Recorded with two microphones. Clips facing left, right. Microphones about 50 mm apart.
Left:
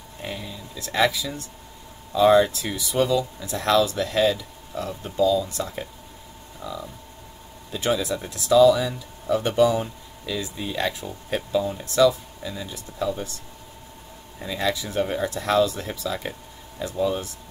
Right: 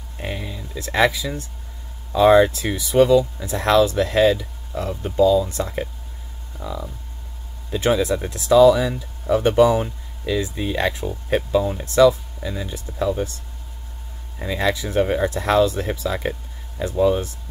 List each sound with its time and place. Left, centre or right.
0.2 s a sound: right
0.7 s speech: right
14.4 s speech: right